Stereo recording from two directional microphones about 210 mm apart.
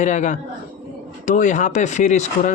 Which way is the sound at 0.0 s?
35° left (ahead or behind).